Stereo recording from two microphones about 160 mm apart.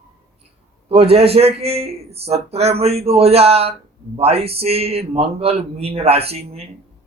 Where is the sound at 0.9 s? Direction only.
35° right (ahead or behind).